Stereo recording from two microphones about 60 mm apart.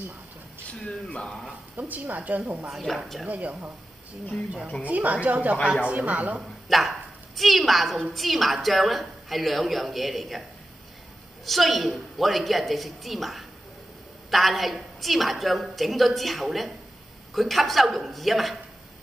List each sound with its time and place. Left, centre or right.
1.8 s a woman's voice: right
2.7 s a woman's voice: centre
3.3 s a woman's voice: right
4.8 s a woman's voice: right
6.7 s a woman's voice: centre
11.4 s a woman's voice: centre